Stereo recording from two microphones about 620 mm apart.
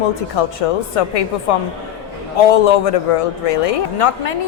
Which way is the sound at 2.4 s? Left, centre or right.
Left.